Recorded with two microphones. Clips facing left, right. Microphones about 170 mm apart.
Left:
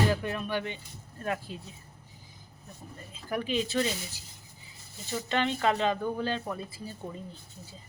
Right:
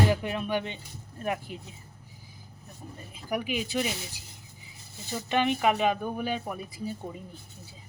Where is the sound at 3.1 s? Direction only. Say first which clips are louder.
Left 1 dB; 15° right (ahead or behind).